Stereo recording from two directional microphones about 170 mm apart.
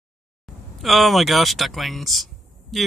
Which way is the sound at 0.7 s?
Centre (ahead or behind).